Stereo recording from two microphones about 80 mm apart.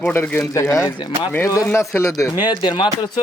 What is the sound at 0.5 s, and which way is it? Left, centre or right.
A man's voice, left.